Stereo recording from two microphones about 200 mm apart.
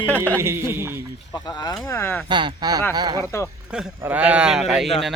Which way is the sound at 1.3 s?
20° left (ahead or behind).